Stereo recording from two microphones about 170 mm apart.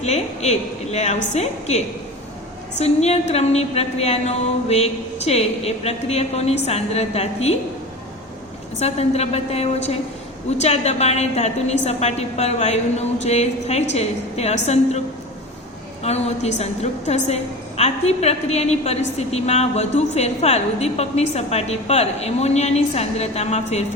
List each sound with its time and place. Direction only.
0.0 s a woman's voice: 40° left (ahead or behind)
8.8 s a woman's voice: 40° left (ahead or behind)
16.0 s a woman's voice: 40° left (ahead or behind)